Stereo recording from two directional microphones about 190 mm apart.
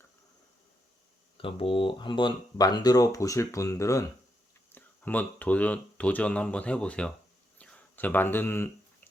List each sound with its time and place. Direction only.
1.4 s speech: 30° left (ahead or behind); by 8.7 s 10° left (ahead or behind)